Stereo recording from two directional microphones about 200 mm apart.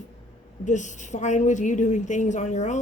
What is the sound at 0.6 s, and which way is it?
A woman's voice, 40° left (ahead or behind).